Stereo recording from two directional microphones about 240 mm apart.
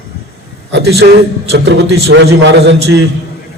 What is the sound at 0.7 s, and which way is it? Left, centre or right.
A man's voice, right.